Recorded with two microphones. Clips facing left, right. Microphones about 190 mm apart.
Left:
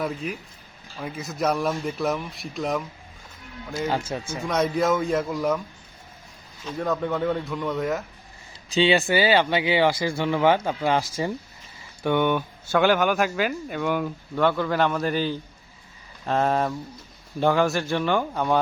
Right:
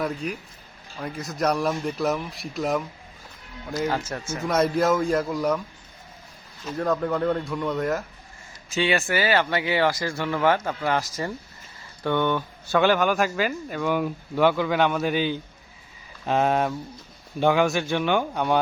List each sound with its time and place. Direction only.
0.0 s speech: centre (ahead or behind)
4.1 s a man's voice: 20° left (ahead or behind)
4.4 s speech: centre (ahead or behind)
6.7 s speech: centre (ahead or behind)
8.7 s a man's voice: 20° left (ahead or behind)
12.0 s a man's voice: 15° left (ahead or behind)
12.7 s speech: centre (ahead or behind)